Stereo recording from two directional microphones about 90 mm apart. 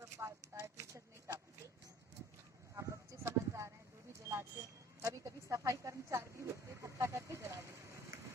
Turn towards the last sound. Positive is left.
turn(degrees=-30)  # may be behind; listen again after turning